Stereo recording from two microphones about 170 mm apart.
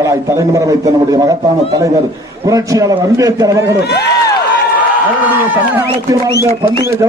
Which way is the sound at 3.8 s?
75° left (ahead or behind).